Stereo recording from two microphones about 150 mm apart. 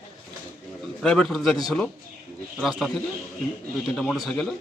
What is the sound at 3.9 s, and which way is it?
Speech, 5° left (ahead or behind).